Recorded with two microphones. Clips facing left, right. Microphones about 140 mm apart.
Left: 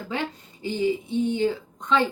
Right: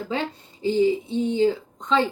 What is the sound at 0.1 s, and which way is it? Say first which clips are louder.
Speech: even; 25° right (ahead or behind).